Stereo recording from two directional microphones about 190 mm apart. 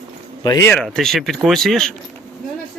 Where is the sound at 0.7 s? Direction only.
Centre (ahead or behind).